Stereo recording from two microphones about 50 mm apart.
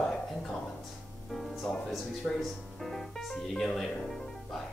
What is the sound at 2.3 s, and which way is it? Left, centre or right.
Speech, centre.